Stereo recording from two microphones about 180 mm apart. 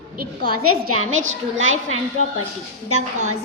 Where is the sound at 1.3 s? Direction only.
90° right.